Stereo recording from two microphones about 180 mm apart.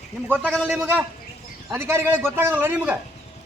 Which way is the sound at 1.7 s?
10° right (ahead or behind).